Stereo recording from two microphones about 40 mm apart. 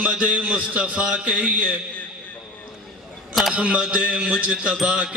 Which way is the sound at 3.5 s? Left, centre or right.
Right.